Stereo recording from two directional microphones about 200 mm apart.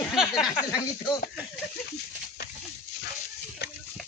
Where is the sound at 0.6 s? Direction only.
20° left (ahead or behind).